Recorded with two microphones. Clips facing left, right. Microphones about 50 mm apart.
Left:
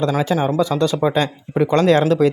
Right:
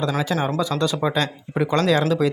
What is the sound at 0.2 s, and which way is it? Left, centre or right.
Speech, centre.